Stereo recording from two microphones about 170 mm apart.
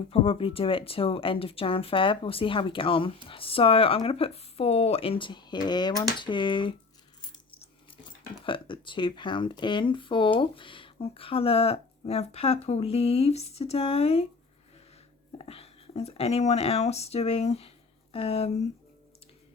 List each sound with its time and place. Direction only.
0.1 s speech: 35° left (ahead or behind)
7.2 s a sound: 25° left (ahead or behind)
7.6 s speech: 30° left (ahead or behind)
15.4 s speech: 35° left (ahead or behind)